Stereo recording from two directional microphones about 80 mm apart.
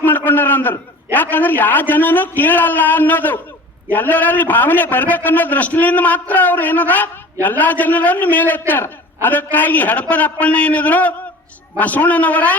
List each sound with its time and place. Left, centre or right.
0.0 s a man's voice: left